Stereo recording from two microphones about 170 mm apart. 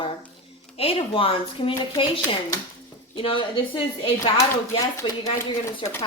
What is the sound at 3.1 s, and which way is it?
A woman's voice, 30° left (ahead or behind).